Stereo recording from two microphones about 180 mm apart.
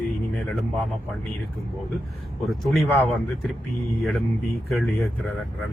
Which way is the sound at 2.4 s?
Centre (ahead or behind).